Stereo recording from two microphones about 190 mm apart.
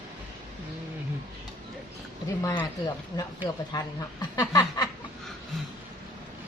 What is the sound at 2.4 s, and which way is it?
A woman's voice, 20° left (ahead or behind).